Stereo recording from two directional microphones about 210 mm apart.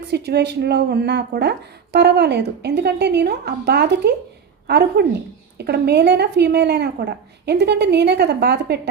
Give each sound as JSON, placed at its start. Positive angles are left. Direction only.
{"t": 0.1, "sound": "speech", "side_deg": -50}